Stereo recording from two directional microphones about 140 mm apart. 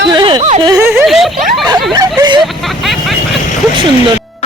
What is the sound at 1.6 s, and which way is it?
Speech, 30° right (ahead or behind).